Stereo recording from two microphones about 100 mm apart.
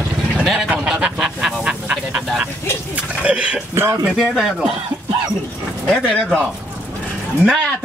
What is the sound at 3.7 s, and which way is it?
Speech, 25° right (ahead or behind).